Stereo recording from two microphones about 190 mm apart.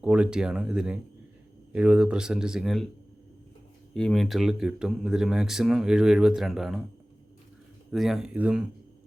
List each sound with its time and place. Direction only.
0.0 s speech: 5° right (ahead or behind)
3.9 s speech: 5° left (ahead or behind)
7.9 s speech: centre (ahead or behind)